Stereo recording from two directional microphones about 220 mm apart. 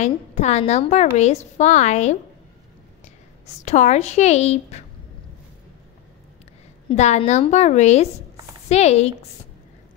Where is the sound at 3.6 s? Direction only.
35° left (ahead or behind).